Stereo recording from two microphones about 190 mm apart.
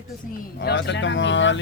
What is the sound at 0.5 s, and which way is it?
Speech, 65° left (ahead or behind).